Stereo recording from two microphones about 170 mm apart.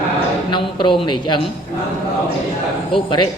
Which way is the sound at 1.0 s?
25° left (ahead or behind).